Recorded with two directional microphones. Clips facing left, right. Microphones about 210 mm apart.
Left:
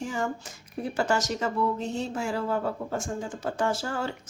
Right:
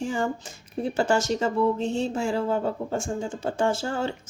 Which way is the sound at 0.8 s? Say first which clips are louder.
Right 3 dB; 25° right (ahead or behind).